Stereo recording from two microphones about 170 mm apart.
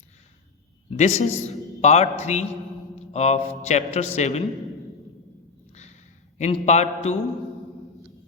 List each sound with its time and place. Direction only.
0.9 s a man's voice: 40° left (ahead or behind)
5.7 s a sound: 40° left (ahead or behind)
6.4 s a man's voice: 40° left (ahead or behind)